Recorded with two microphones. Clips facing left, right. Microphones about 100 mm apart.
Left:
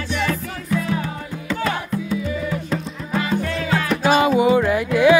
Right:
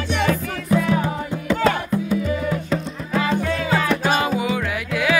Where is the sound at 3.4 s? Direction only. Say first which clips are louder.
Right 1 dB; 10° right (ahead or behind).